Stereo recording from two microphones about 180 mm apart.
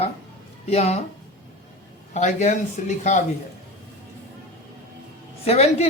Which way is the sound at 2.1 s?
40° left (ahead or behind).